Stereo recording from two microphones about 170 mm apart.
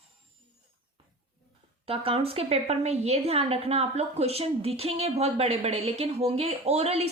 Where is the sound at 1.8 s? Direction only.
35° right (ahead or behind).